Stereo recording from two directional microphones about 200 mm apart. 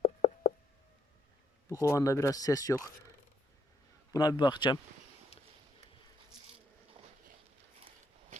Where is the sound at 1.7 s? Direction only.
15° left (ahead or behind).